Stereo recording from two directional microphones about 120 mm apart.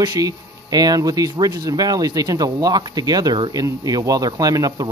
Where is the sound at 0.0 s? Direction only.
30° right (ahead or behind).